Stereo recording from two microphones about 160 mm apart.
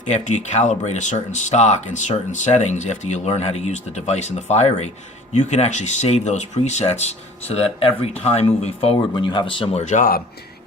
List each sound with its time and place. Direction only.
0.1 s speech: 45° left (ahead or behind); by 9.8 s 30° left (ahead or behind)
9.8 s speech: 50° left (ahead or behind)